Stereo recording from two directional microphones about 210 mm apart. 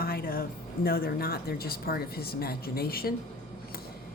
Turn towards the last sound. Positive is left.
turn(degrees=45)  # may be behind; listen again after turning